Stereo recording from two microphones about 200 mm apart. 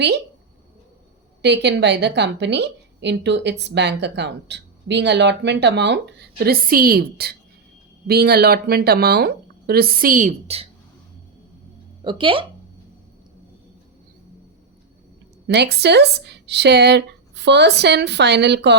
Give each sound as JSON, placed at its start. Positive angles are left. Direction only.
{"t": 1.4, "sound": "a woman's voice", "side_deg": -60}
{"t": 12.0, "sound": "speech", "side_deg": -25}
{"t": 15.4, "sound": "a woman's voice", "side_deg": -55}